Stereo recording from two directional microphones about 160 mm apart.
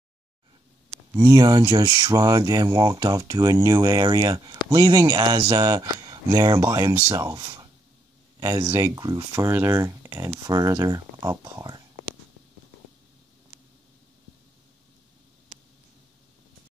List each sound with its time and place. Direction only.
1.1 s speech: 25° right (ahead or behind)